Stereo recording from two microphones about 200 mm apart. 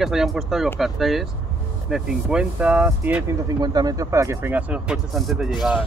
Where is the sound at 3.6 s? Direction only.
20° right (ahead or behind); by 5.8 s centre (ahead or behind).